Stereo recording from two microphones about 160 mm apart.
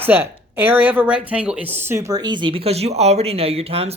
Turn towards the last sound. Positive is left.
turn(degrees=-40)  # may be behind; listen again after turning